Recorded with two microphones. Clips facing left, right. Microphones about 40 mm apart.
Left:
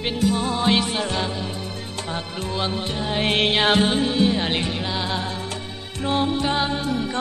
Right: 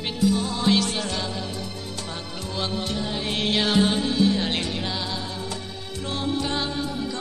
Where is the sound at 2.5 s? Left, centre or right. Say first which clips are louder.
Left 1 dB; left.